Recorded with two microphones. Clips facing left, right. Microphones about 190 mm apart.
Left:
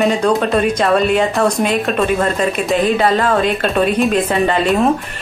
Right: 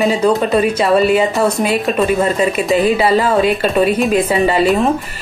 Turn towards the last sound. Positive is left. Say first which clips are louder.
# right 2 dB
turn(degrees=-5)  # may be behind; listen again after turning